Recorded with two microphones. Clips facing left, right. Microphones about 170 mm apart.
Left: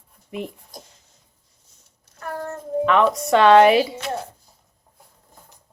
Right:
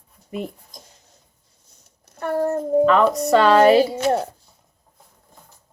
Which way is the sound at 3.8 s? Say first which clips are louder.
Right 7 dB; 40° right (ahead or behind).